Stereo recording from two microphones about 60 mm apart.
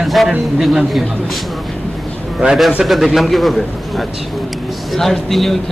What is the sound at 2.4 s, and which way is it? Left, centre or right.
Speech, centre.